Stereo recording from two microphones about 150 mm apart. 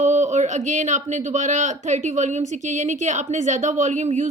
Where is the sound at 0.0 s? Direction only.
50° right (ahead or behind).